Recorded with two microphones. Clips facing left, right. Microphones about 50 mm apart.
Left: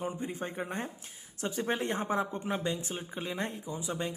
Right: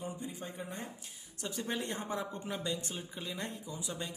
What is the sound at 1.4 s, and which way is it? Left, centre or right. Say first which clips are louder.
Speech: left 6 dB; left.